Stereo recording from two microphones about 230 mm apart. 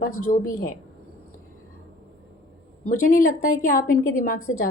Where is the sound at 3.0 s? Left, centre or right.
Left.